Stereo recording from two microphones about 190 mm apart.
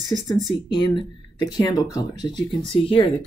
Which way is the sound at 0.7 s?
25° left (ahead or behind).